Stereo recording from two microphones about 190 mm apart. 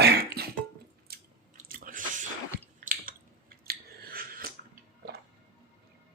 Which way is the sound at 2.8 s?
50° right (ahead or behind).